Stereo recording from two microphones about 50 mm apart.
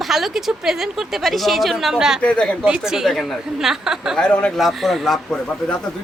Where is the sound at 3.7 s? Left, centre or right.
Centre.